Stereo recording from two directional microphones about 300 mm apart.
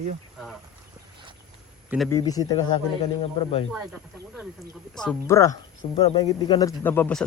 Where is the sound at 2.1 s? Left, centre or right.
Centre.